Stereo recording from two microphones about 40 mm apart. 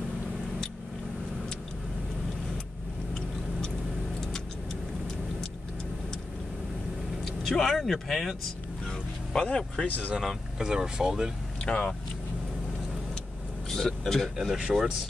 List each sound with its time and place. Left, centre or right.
7.2 s speech: centre
9.3 s speech: centre
9.8 s speech: left
10.6 s speech: centre
11.7 s speech: left
13.7 s speech: centre
14.7 s speech: centre